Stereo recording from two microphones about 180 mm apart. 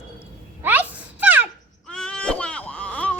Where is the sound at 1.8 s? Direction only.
5° left (ahead or behind).